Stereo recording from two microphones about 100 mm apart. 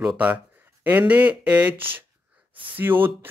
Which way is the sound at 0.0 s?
10° right (ahead or behind).